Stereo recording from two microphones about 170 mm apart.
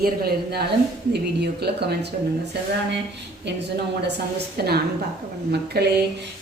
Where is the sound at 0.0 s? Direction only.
65° right (ahead or behind); by 3.6 s 90° right.